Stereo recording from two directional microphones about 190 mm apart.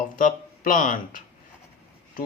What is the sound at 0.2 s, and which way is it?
Speech, 45° left (ahead or behind).